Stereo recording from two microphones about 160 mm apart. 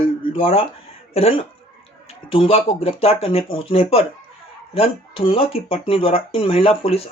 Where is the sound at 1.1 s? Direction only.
35° left (ahead or behind).